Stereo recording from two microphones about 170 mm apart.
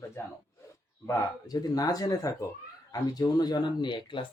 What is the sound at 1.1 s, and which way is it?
Speech, 20° left (ahead or behind).